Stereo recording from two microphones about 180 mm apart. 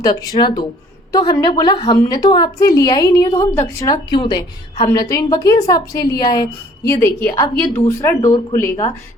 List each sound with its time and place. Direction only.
0.0 s a woman's voice: 20° left (ahead or behind)